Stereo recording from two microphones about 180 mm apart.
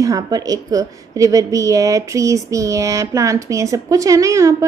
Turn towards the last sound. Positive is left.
turn(degrees=-15)  # may be behind; listen again after turning